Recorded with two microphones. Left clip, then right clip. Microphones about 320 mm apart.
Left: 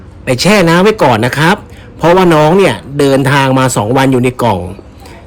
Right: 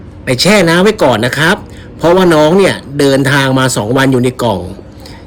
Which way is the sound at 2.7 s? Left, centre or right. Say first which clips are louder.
Even; centre.